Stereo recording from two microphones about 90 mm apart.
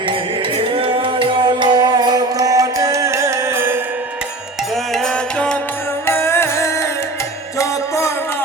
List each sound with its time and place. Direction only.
0.1 s music: 80° right; by 3.8 s 25° right (ahead or behind)
4.7 s music: 5° left (ahead or behind)
6.1 s music: 30° left (ahead or behind)